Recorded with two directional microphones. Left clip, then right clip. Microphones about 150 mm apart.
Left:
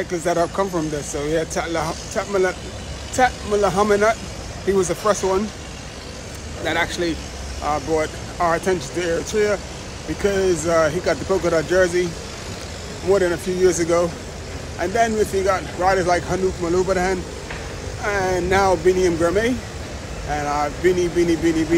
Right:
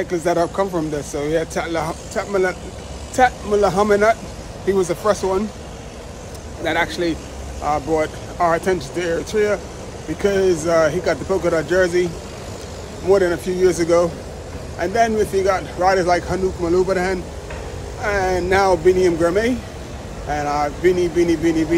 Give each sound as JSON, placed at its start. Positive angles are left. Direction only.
{"t": 0.0, "sound": "speech", "side_deg": -20}
{"t": 6.6, "sound": "speech", "side_deg": -25}
{"t": 13.1, "sound": "speech", "side_deg": -20}